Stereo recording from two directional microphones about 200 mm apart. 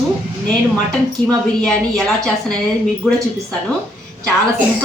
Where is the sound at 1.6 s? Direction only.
5° left (ahead or behind).